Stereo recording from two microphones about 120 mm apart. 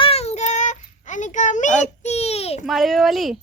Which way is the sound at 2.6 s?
Centre (ahead or behind).